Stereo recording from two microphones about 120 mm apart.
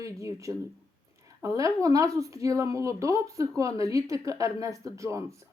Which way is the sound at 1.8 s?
25° right (ahead or behind).